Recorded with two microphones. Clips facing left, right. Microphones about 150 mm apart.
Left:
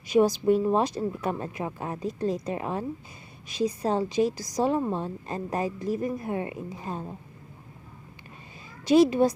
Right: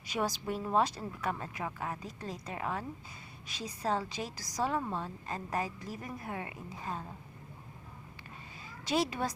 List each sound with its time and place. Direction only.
0.1 s a woman's voice: 20° left (ahead or behind)
8.8 s a woman's voice: 15° left (ahead or behind)